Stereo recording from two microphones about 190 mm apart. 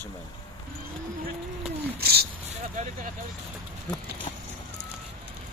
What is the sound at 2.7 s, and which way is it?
Speech, 40° right (ahead or behind).